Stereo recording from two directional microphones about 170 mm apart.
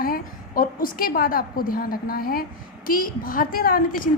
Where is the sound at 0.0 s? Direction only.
55° left (ahead or behind).